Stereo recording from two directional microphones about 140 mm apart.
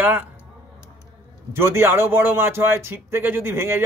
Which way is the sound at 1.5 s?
20° right (ahead or behind).